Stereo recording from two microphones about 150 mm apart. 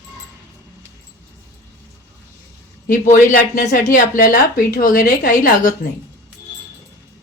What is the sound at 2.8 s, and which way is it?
A woman's voice, 60° left (ahead or behind).